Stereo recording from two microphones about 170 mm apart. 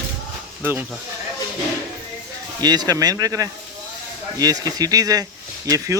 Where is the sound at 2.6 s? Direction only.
25° right (ahead or behind).